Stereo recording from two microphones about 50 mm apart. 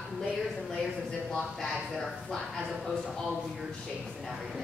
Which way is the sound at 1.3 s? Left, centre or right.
Centre.